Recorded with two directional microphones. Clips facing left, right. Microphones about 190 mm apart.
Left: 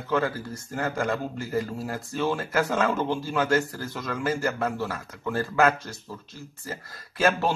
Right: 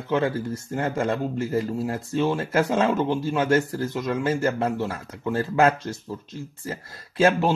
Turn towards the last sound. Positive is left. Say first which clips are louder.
# right 4 dB
turn(degrees=-25)  # may be behind; listen again after turning